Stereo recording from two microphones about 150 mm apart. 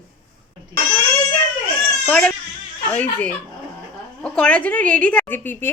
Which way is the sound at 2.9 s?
10° left (ahead or behind).